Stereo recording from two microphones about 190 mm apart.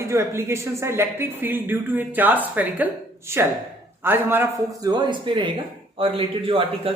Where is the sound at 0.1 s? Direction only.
15° right (ahead or behind).